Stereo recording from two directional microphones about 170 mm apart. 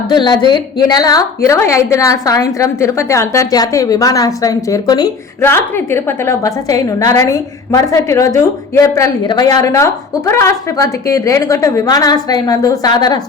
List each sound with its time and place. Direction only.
0.1 s a woman's voice: 25° left (ahead or behind)
5.5 s a woman's voice: 15° left (ahead or behind)